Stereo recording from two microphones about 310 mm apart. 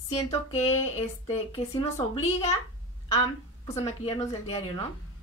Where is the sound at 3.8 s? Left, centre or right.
Centre.